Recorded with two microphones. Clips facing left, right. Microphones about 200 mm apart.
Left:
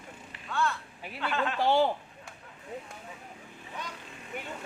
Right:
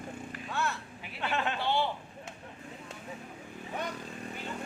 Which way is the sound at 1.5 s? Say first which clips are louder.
Left 10 dB; 45° left (ahead or behind).